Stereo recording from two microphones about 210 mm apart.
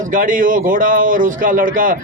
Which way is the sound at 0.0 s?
40° right (ahead or behind).